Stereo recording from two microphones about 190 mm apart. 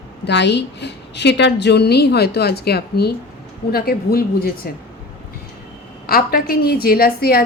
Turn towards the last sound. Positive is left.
turn(degrees=50)  # may be behind; listen again after turning